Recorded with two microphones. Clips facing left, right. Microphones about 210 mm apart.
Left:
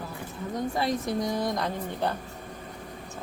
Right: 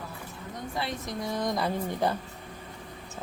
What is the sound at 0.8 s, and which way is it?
Speech, 40° left (ahead or behind).